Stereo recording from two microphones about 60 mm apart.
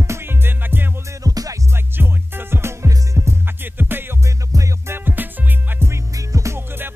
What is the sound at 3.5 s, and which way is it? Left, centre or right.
Music, right.